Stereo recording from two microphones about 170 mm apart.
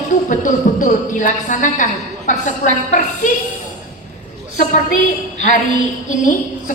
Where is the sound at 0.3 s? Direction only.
50° left (ahead or behind).